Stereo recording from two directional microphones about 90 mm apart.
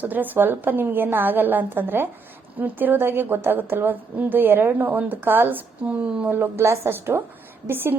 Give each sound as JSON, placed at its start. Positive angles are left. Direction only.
{"t": 0.0, "sound": "a woman's voice", "side_deg": -20}